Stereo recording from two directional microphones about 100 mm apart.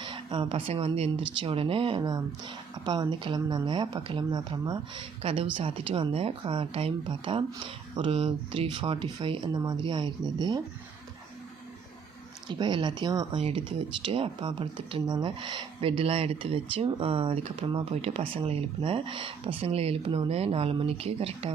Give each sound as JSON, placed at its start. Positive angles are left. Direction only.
{"t": 0.0, "sound": "speech", "side_deg": -55}
{"t": 2.8, "sound": "speech", "side_deg": -45}
{"t": 5.2, "sound": "speech", "side_deg": -75}
{"t": 5.5, "sound": "speech", "side_deg": -60}
{"t": 12.5, "sound": "speech", "side_deg": -50}
{"t": 13.3, "sound": "speech", "side_deg": -80}
{"t": 14.0, "sound": "speech", "side_deg": -60}